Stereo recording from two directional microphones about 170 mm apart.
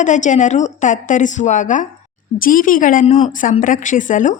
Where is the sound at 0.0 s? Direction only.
45° left (ahead or behind).